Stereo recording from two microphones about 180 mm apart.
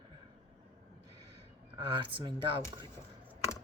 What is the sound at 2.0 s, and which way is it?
Speech, 25° right (ahead or behind).